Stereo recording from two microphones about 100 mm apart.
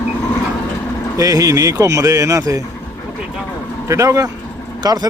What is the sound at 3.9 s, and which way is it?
Speech, 30° right (ahead or behind).